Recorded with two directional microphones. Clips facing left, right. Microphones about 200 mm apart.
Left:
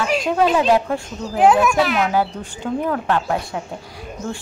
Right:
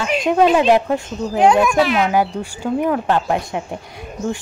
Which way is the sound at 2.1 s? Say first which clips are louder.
Right 2 dB; 15° right (ahead or behind).